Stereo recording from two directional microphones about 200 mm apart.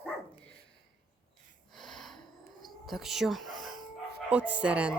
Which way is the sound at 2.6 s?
Centre (ahead or behind).